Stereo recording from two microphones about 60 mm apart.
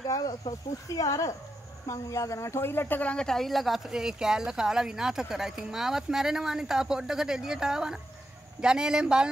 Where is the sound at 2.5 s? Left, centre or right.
Left.